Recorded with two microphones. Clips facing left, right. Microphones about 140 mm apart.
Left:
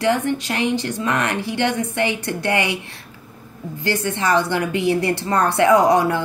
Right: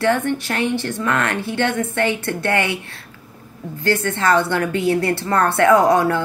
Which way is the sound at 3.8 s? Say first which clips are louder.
Right 2 dB; 20° left (ahead or behind).